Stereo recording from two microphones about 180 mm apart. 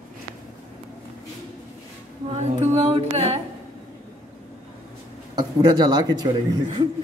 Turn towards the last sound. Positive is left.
turn(degrees=-25)  # may be behind; listen again after turning